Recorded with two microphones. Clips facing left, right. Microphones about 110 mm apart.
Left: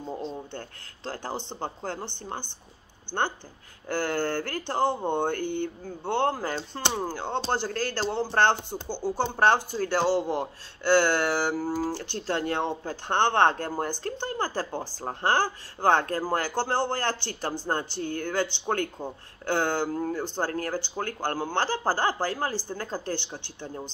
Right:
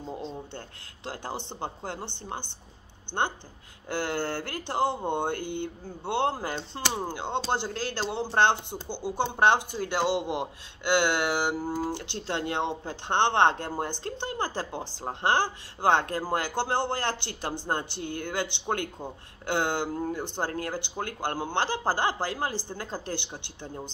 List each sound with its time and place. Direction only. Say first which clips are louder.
0.0 s speech: left 2 dB; 5° left (ahead or behind)
1.0 s speech: left 2 dB; 20° right (ahead or behind)
10.1 s a man's voice: left 3 dB; 45° left (ahead or behind)
10.4 s speech: left 3 dB; 20° right (ahead or behind)